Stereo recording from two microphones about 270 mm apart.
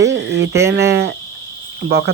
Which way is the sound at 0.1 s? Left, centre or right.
Right.